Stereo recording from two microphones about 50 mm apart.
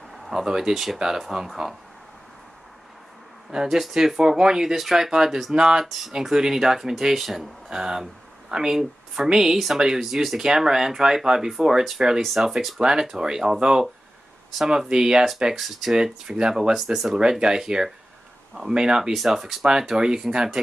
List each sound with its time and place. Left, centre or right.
0.2 s speech: centre
3.6 s speech: centre
16.7 s speech: centre